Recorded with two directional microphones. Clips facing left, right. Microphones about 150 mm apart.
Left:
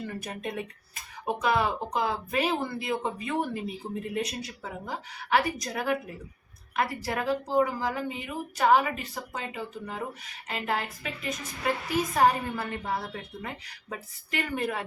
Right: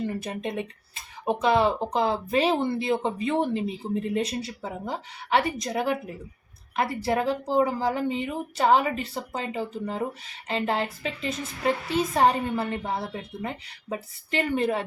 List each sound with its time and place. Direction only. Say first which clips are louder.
0.0 s a woman's voice: right 5 dB; 25° right (ahead or behind)